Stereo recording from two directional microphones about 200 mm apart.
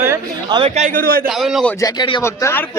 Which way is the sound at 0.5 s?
30° right (ahead or behind).